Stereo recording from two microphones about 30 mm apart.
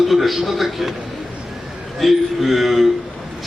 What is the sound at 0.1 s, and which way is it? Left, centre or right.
Speech, centre.